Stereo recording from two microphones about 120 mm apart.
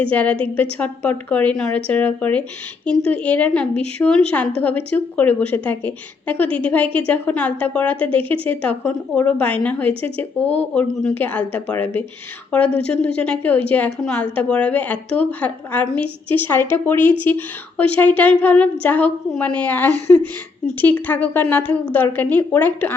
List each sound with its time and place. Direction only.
0.0 s a woman's voice: 15° left (ahead or behind)